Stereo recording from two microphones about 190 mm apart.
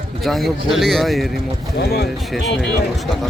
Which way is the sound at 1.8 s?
55° left (ahead or behind).